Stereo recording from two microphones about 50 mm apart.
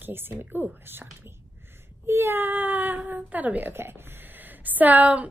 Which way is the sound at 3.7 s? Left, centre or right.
Right.